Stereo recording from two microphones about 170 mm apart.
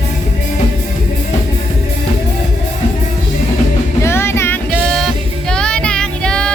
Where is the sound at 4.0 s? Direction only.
15° left (ahead or behind).